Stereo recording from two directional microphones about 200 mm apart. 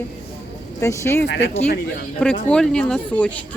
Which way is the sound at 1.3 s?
60° left (ahead or behind).